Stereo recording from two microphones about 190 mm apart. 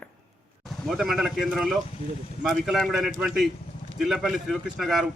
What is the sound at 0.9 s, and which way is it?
Speech, centre (ahead or behind).